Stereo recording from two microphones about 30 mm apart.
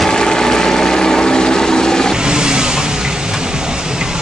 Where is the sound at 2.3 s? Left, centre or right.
Right.